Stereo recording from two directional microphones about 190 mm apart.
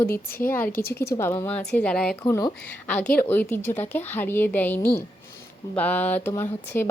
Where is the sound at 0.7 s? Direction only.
55° left (ahead or behind).